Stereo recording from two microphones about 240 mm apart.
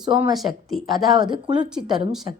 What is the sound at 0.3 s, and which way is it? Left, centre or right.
Speech, centre.